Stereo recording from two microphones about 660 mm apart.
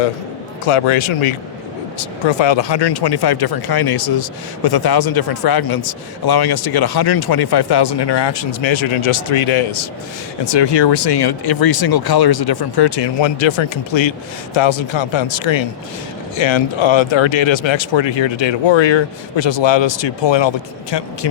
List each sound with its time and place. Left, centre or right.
0.7 s a man's voice: left